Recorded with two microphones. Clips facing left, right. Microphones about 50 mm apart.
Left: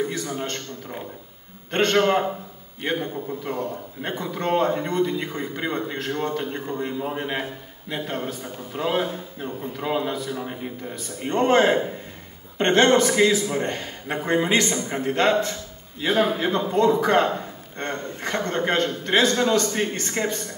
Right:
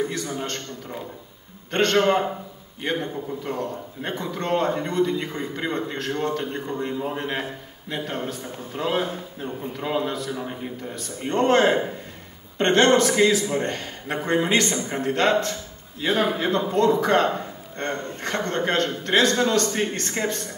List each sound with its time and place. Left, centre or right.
0.0 s a man's voice: centre